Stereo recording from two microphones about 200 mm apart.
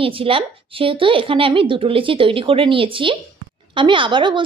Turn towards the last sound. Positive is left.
turn(degrees=-25)  # may be behind; listen again after turning